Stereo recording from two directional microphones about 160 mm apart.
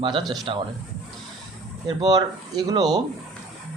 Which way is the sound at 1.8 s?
25° right (ahead or behind).